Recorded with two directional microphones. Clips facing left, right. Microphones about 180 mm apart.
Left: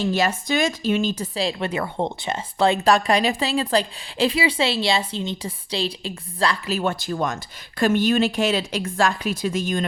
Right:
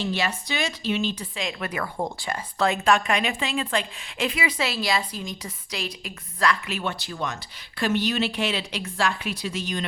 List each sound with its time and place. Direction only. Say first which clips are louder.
0.0 s a woman's voice: left 5 dB; 45° left (ahead or behind)